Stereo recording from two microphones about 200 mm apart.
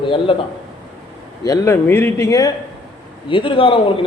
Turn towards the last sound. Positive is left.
turn(degrees=25)  # may be behind; listen again after turning